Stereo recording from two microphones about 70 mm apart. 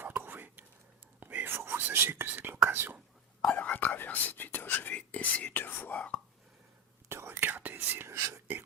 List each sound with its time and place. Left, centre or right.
0.0 s whispering: right
3.4 s whispering: left
7.1 s whispering: right